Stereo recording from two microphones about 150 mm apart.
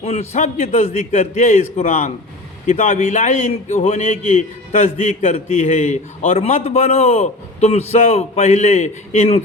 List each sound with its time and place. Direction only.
0.0 s a man's voice: 45° left (ahead or behind)